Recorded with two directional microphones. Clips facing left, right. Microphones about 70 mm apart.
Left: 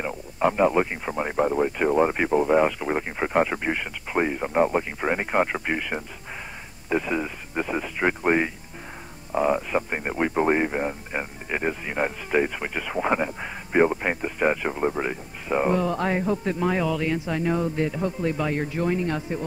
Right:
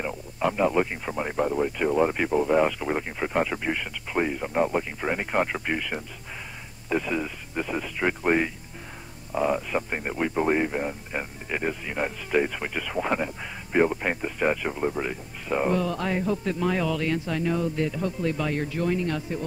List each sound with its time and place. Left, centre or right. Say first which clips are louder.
0.4 s speech: left 3 dB; left
10.1 s speech: left 2 dB; left; by 17.4 s centre
17.4 s speech: left 3 dB; left